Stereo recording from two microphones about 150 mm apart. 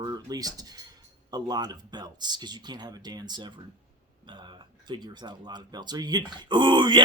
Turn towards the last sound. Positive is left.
turn(degrees=-30)  # may be behind; listen again after turning